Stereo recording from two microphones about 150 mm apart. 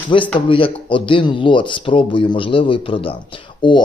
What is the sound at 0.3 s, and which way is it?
Speech, 35° left (ahead or behind).